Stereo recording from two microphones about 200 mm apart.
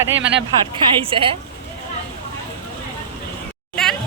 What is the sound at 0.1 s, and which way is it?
Speech, 65° right (ahead or behind).